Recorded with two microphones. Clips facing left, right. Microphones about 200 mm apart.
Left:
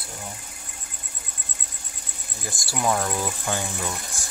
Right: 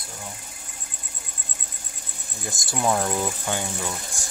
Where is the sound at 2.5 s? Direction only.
20° right (ahead or behind).